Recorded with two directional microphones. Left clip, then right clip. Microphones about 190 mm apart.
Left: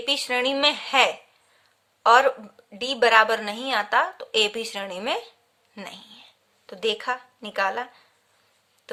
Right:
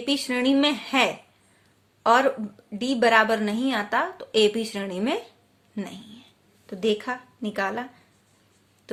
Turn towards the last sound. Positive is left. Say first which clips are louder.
# left 2 dB
turn(degrees=20)  # may be behind; listen again after turning